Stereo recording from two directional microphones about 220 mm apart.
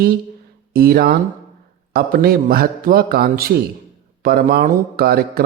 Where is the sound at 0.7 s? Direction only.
45° right (ahead or behind).